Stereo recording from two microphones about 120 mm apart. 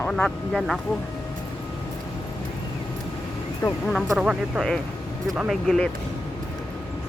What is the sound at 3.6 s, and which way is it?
Speech, 25° left (ahead or behind).